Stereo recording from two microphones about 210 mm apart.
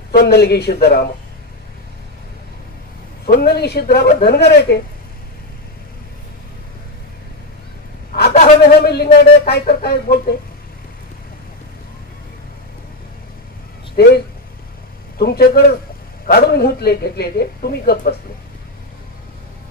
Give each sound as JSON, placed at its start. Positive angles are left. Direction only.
{"t": 0.1, "sound": "a man's voice", "side_deg": 50}
{"t": 3.3, "sound": "a man's voice", "side_deg": 50}
{"t": 8.1, "sound": "a sound", "side_deg": 45}
{"t": 8.8, "sound": "a man's voice", "side_deg": 50}
{"t": 13.9, "sound": "a man's voice", "side_deg": 50}